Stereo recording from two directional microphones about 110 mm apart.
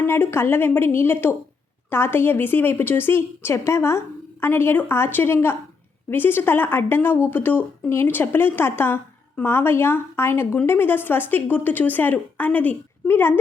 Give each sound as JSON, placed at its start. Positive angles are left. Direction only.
{"t": 0.0, "sound": "a woman's voice", "side_deg": 20}